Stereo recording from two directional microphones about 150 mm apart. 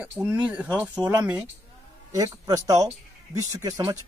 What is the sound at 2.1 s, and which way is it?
Speech, 25° right (ahead or behind).